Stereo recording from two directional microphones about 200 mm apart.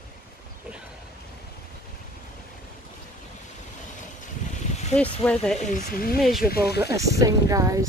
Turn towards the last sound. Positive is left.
turn(degrees=-15)  # may be behind; listen again after turning